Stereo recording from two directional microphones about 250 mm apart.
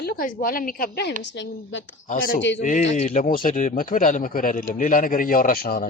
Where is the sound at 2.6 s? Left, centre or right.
Left.